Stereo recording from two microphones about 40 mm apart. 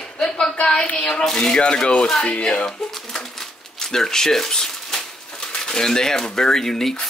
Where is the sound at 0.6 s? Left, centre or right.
Left.